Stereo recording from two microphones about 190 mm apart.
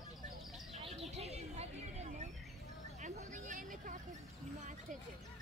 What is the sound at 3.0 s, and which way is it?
Vehicle, 40° right (ahead or behind).